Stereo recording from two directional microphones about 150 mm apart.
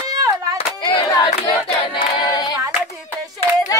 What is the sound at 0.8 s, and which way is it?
Choir, 30° left (ahead or behind).